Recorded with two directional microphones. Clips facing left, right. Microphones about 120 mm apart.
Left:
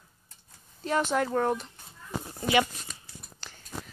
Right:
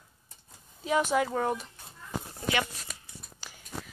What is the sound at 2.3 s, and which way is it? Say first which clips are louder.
Speech: left 6 dB; 10° left (ahead or behind).